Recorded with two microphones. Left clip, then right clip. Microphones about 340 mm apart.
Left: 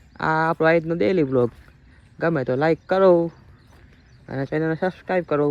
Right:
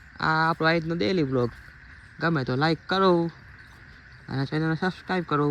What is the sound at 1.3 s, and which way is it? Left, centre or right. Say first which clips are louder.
Speech: left 6 dB; left.